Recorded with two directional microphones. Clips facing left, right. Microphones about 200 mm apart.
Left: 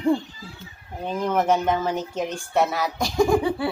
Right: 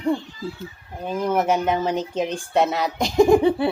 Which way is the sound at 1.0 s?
10° right (ahead or behind).